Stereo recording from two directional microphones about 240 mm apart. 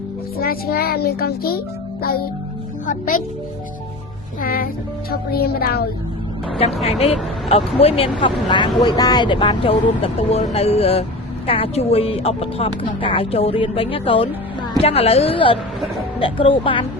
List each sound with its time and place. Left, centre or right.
0.3 s a child's voice: left
4.4 s a child's voice: left
7.0 s speech: left